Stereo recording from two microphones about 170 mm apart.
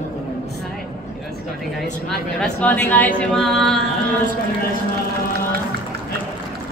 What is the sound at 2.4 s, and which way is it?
Speech, 5° left (ahead or behind).